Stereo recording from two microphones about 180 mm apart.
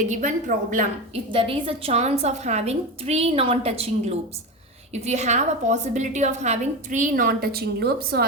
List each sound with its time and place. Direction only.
0.0 s a woman's voice: 45° right (ahead or behind)
1.3 s a woman's voice: 30° right (ahead or behind); by 8.2 s 60° right (ahead or behind)